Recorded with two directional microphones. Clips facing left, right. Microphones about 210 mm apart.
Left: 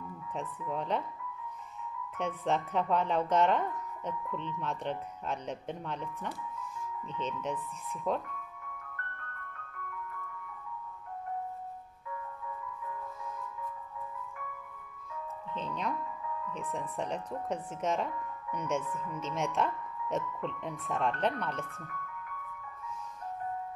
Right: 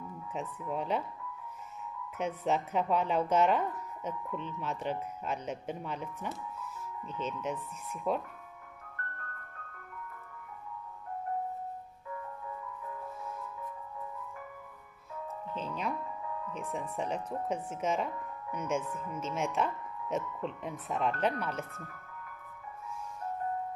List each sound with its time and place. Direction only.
0.3 s speech: 5° right (ahead or behind)
2.1 s speech: 5° right (ahead or behind)
7.2 s speech: 5° right (ahead or behind)
15.5 s music: 5° right (ahead or behind)
16.9 s speech: 5° right (ahead or behind)
18.8 s speech: 35° right (ahead or behind)
19.1 s speech: centre (ahead or behind)